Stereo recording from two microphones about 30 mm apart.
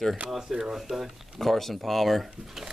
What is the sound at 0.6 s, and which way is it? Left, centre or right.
Speech, centre.